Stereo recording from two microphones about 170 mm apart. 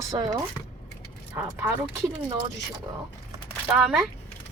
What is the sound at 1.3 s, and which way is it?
Speech, 15° right (ahead or behind).